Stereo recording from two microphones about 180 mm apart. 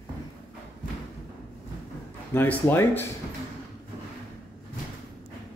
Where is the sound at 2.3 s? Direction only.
10° left (ahead or behind).